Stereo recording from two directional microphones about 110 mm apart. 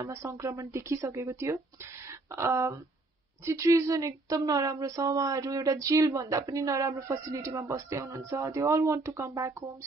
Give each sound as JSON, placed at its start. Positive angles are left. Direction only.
{"t": 0.1, "sound": "speech", "side_deg": -25}